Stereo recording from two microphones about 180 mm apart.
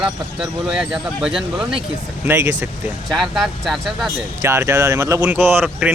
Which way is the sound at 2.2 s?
15° right (ahead or behind).